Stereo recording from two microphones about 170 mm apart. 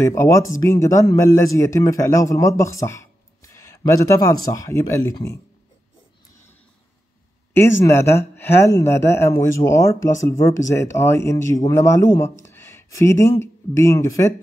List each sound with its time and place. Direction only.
0.0 s speech: 15° left (ahead or behind)
7.8 s speech: 15° left (ahead or behind)